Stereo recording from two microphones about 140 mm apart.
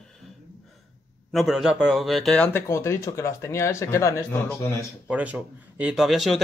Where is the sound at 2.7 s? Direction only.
20° left (ahead or behind).